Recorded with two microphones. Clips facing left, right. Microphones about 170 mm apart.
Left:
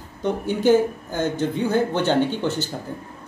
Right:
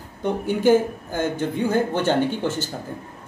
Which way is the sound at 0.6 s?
50° right (ahead or behind).